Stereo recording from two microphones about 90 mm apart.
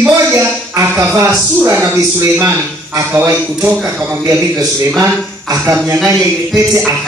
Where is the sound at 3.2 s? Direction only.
20° right (ahead or behind).